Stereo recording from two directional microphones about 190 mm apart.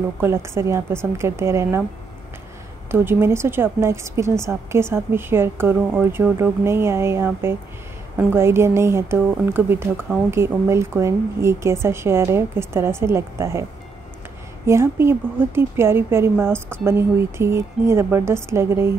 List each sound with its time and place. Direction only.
0.2 s a woman's voice: 15° right (ahead or behind)
2.9 s a woman's voice: 15° right (ahead or behind)
14.7 s a woman's voice: 15° right (ahead or behind)